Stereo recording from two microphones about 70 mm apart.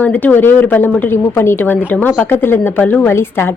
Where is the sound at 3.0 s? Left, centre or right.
Left.